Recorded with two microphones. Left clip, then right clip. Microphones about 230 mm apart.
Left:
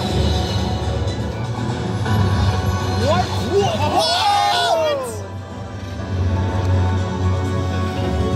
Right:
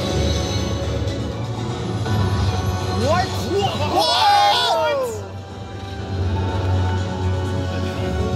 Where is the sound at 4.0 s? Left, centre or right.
Right.